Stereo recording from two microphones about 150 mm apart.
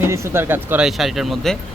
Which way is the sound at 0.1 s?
15° right (ahead or behind).